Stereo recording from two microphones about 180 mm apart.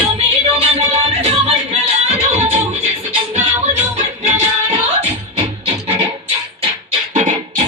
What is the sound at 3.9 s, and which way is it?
Music, 35° right (ahead or behind).